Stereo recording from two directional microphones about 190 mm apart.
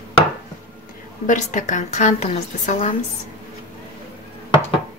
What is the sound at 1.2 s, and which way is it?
A woman's voice, 40° left (ahead or behind).